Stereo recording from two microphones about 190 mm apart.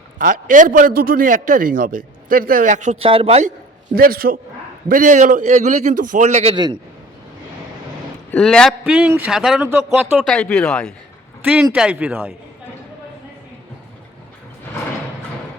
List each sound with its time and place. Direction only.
0.2 s a man's voice: 45° right (ahead or behind); by 6.7 s 25° right (ahead or behind)
8.3 s speech: 5° left (ahead or behind)
10.2 s speech: 5° left (ahead or behind)